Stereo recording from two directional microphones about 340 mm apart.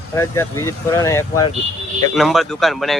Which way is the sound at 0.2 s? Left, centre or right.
Centre.